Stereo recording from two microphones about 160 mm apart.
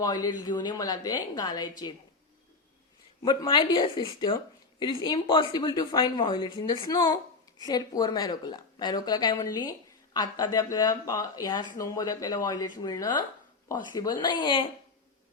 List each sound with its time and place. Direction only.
0.0 s speech: 25° left (ahead or behind)
3.2 s speech: 30° left (ahead or behind)